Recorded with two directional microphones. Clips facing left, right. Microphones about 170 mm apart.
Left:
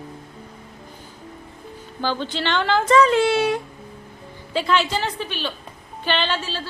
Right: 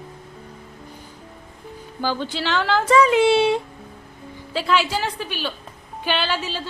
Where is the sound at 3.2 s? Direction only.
25° right (ahead or behind).